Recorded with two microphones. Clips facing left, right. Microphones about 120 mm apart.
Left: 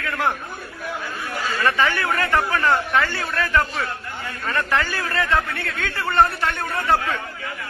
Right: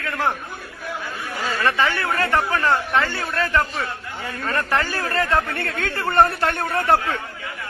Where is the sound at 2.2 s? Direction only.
25° right (ahead or behind); by 6.9 s 55° right (ahead or behind).